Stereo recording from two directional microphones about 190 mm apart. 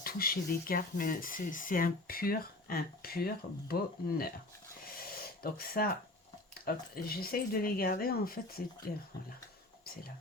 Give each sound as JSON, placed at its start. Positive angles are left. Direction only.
{"t": 0.0, "sound": "speech", "side_deg": 50}
{"t": 4.9, "sound": "a sound", "side_deg": 50}
{"t": 6.7, "sound": "speech", "side_deg": 50}